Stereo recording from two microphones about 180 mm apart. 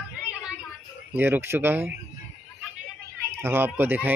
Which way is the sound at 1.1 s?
10° right (ahead or behind).